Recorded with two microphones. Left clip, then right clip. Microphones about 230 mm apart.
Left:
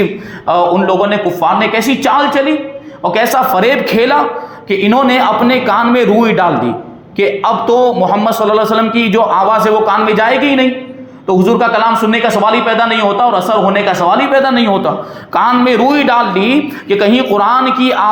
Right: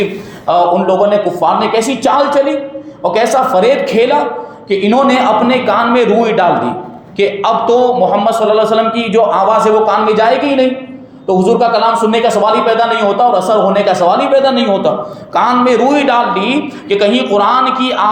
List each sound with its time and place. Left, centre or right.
0.4 s a man's voice: left